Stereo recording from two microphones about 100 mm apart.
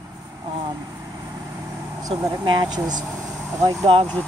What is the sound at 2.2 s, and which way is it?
Speech, 45° right (ahead or behind).